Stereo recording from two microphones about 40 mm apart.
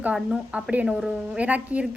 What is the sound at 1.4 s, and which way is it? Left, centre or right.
Speech, right.